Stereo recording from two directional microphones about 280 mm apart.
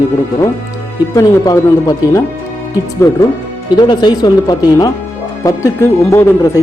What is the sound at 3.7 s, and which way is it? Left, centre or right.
Speech, centre.